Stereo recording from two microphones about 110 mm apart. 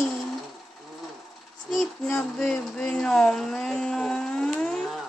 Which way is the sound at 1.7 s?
10° left (ahead or behind).